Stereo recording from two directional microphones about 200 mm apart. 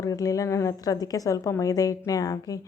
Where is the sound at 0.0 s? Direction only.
15° left (ahead or behind).